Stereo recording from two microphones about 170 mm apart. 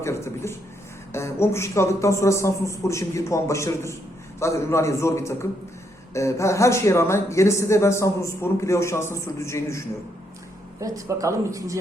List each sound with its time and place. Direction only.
0.0 s a man's voice: 15° left (ahead or behind)
10.8 s speech: 20° right (ahead or behind)